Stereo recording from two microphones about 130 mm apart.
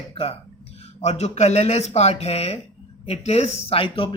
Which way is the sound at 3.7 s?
45° left (ahead or behind).